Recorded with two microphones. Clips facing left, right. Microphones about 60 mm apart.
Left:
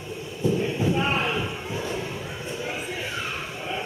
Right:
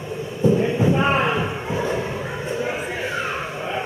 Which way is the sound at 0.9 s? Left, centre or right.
Right.